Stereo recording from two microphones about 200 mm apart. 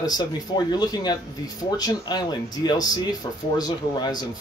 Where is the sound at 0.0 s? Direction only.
20° left (ahead or behind).